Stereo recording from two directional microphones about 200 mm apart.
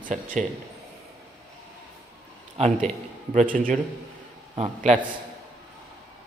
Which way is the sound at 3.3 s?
45° right (ahead or behind).